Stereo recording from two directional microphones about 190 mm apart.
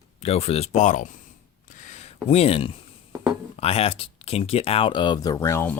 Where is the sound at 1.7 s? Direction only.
40° left (ahead or behind).